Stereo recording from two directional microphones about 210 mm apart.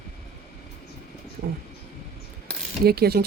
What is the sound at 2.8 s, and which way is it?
Speech, 45° right (ahead or behind).